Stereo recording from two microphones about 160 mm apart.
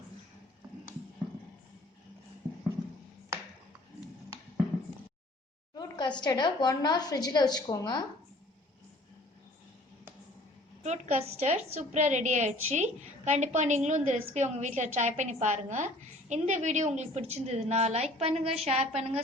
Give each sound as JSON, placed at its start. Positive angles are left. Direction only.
{"t": 5.7, "sound": "a sound", "side_deg": 25}
{"t": 6.2, "sound": "a woman's voice", "side_deg": 30}
{"t": 10.8, "sound": "a woman's voice", "side_deg": -45}